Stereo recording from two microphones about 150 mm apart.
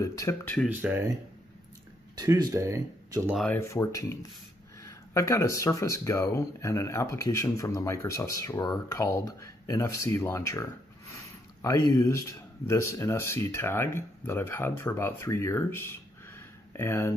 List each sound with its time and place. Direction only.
0.0 s speech: 20° left (ahead or behind)
0.7 s speech: 15° right (ahead or behind)
2.1 s speech: 25° right (ahead or behind)
3.5 s speech: 20° left (ahead or behind)